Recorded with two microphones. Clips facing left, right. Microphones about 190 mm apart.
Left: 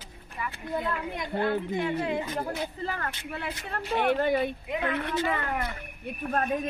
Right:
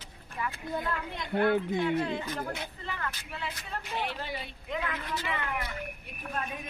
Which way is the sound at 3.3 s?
55° left (ahead or behind).